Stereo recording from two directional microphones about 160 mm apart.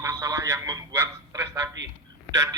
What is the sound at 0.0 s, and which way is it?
Radio, 20° right (ahead or behind).